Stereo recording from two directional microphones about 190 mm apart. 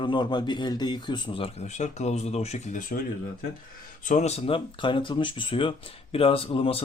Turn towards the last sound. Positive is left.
turn(degrees=30)  # may be behind; listen again after turning